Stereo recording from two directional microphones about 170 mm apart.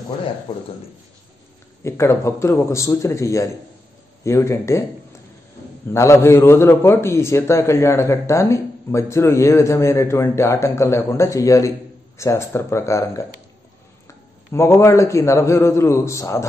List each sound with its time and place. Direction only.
1.8 s a man's voice: 15° left (ahead or behind)
5.9 s a man's voice: 15° left (ahead or behind)